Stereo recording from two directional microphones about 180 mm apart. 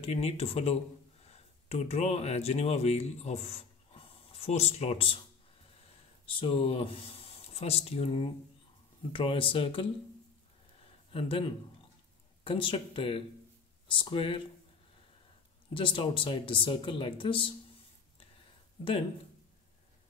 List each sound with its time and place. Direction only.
0.0 s speech: 35° left (ahead or behind)
6.2 s speech: 30° left (ahead or behind)
11.1 s speech: 30° left (ahead or behind)
12.4 s speech: 30° left (ahead or behind)
15.7 s speech: 25° left (ahead or behind)